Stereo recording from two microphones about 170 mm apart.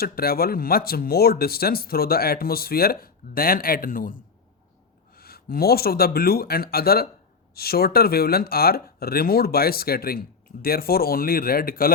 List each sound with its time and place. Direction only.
0.0 s speech: 65° left (ahead or behind)